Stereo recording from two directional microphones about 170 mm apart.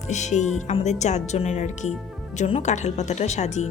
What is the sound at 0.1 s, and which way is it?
A woman's voice, 45° left (ahead or behind).